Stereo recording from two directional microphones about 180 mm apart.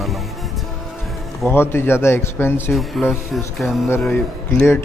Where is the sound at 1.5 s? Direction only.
15° left (ahead or behind).